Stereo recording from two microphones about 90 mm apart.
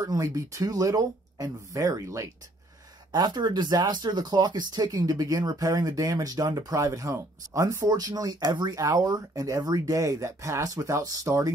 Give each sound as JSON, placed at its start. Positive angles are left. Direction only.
{"t": 0.0, "sound": "speech", "side_deg": -40}
{"t": 3.1, "sound": "speech", "side_deg": -50}